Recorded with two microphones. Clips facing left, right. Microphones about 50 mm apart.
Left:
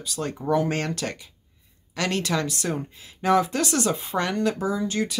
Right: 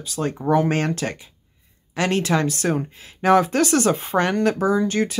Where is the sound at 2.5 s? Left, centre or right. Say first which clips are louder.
Right 6 dB; right.